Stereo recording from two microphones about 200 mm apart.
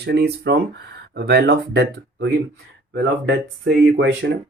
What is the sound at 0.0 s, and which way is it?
Speech, 55° right (ahead or behind).